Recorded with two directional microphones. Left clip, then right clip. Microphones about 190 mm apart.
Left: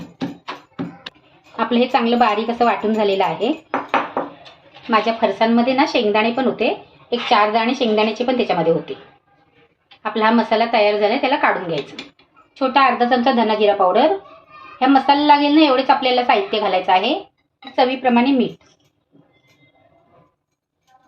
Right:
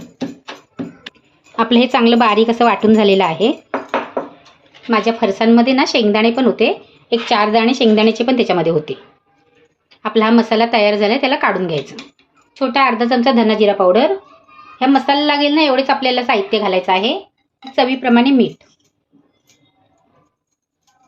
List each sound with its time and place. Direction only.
1.5 s a woman's voice: 50° right (ahead or behind)
4.9 s a woman's voice: 40° right (ahead or behind)
10.0 s a woman's voice: 55° right (ahead or behind)
12.5 s a woman's voice: 40° right (ahead or behind)
17.7 s a woman's voice: 60° right (ahead or behind)